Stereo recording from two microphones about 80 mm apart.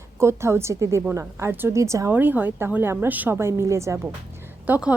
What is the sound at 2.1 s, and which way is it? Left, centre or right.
A woman's voice, right.